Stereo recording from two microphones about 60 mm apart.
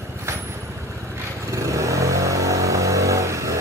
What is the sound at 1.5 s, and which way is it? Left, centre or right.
Vehicle, right.